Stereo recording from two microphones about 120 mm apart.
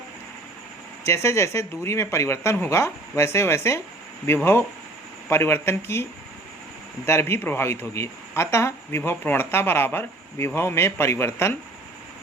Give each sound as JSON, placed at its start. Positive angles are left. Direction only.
{"t": 1.0, "sound": "speech", "side_deg": 25}